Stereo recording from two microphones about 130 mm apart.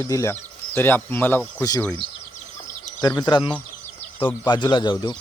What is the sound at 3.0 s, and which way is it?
Speech, 30° left (ahead or behind).